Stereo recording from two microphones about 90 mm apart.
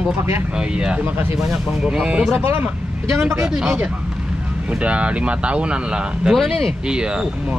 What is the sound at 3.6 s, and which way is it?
Speech, 10° right (ahead or behind).